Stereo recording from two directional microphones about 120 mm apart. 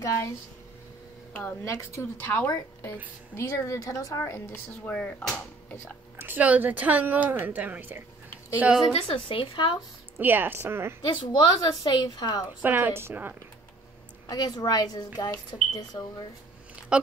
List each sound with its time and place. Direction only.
0.0 s a woman's voice: 25° left (ahead or behind)
1.6 s a woman's voice: 25° left (ahead or behind)
4.2 s speech: 15° left (ahead or behind)
6.1 s a woman's voice: 15° right (ahead or behind)
8.9 s speech: 50° left (ahead or behind)
10.1 s speech: 15° right (ahead or behind)
11.1 s a woman's voice: 45° left (ahead or behind)
12.6 s a woman's voice: 15° right (ahead or behind)
14.2 s a woman's voice: 30° left (ahead or behind)
16.9 s speech: 10° right (ahead or behind)